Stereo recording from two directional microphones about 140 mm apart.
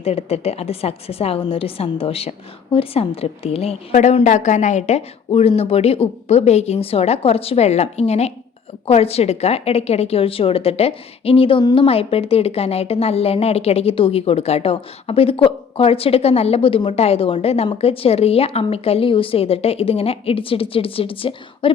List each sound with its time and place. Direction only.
0.0 s a woman's voice: 45° left (ahead or behind)
3.9 s a woman's voice: 55° left (ahead or behind); by 21.7 s 40° left (ahead or behind)